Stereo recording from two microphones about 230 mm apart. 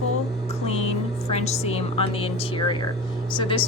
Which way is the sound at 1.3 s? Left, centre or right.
Left.